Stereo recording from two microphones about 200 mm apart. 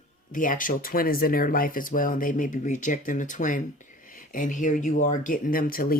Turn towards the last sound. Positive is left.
turn(degrees=45)  # may be behind; listen again after turning